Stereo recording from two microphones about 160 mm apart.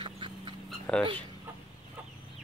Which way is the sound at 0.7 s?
5° left (ahead or behind).